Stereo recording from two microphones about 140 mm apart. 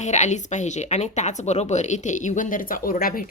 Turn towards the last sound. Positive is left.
turn(degrees=75)  # may be behind; listen again after turning